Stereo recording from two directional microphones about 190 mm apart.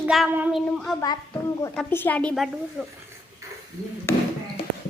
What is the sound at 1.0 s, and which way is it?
Speech, 20° left (ahead or behind).